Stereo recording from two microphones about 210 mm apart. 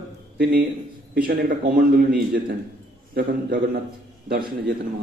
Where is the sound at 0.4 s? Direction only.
45° right (ahead or behind).